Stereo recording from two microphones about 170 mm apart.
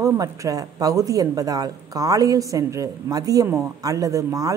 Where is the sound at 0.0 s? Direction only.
20° right (ahead or behind).